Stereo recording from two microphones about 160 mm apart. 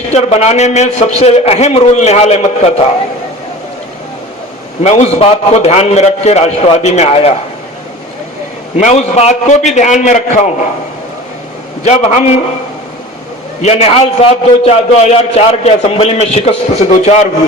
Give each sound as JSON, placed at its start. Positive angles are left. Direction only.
{"t": 0.1, "sound": "a man's voice", "side_deg": 40}
{"t": 4.8, "sound": "a man's voice", "side_deg": 40}
{"t": 8.8, "sound": "a man's voice", "side_deg": 45}
{"t": 11.9, "sound": "a man's voice", "side_deg": 45}
{"t": 13.6, "sound": "a man's voice", "side_deg": 40}